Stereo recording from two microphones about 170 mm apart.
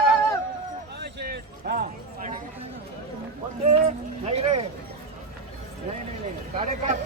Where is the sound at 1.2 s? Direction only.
65° right (ahead or behind).